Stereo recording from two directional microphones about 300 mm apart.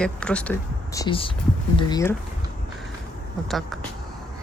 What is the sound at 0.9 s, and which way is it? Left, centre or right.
Speech, centre.